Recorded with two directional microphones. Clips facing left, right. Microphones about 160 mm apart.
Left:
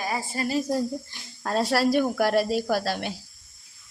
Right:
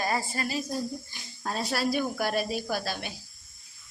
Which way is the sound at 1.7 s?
80° left.